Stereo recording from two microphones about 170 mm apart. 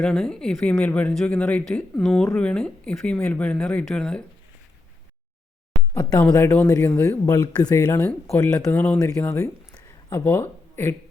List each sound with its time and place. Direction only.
0.0 s speech: 5° left (ahead or behind)
5.9 s speech: 10° left (ahead or behind)
9.7 s a sound: 10° left (ahead or behind)